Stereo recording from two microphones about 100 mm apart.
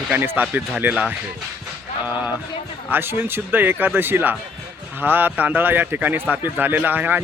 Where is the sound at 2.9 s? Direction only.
25° right (ahead or behind).